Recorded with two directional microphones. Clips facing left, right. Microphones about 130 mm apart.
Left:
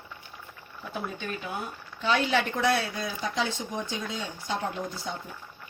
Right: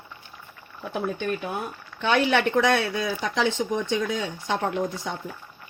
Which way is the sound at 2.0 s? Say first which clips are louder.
Right 4 dB; 75° right (ahead or behind).